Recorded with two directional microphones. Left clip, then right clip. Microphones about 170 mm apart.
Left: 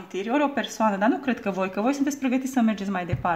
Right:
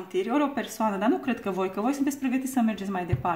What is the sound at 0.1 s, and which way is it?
Speech, 30° left (ahead or behind).